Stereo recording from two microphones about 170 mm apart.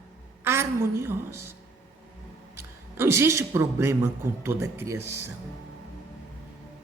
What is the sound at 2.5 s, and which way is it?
A man's voice, 15° right (ahead or behind).